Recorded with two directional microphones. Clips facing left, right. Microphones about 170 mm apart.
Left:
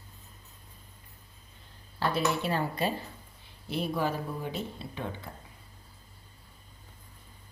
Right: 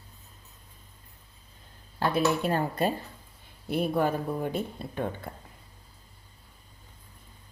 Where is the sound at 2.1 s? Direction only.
50° right (ahead or behind).